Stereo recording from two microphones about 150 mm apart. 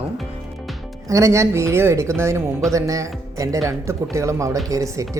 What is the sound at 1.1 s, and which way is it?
Speech, 20° right (ahead or behind).